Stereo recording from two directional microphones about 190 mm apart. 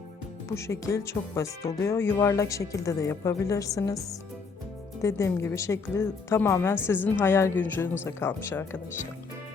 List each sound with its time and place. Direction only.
0.4 s speech: 15° left (ahead or behind)